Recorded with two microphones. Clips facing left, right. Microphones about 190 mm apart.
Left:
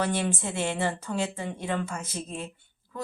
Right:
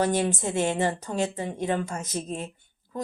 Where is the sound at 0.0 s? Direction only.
40° right (ahead or behind).